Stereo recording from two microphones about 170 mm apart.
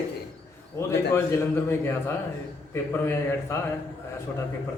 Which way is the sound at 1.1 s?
15° left (ahead or behind).